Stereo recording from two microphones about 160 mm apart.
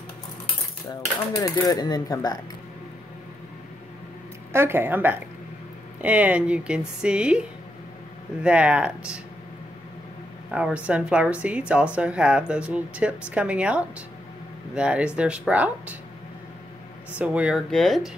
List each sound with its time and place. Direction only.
1.3 s speech: 20° left (ahead or behind)
4.5 s a woman's voice: 15° right (ahead or behind)
10.5 s a woman's voice: 5° right (ahead or behind)
17.2 s a woman's voice: 10° right (ahead or behind)